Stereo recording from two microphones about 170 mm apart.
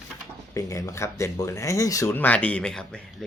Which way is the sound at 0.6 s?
20° left (ahead or behind).